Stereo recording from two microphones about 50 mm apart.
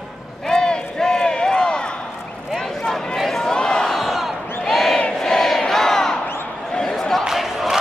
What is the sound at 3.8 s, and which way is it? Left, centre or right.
Crowd, centre.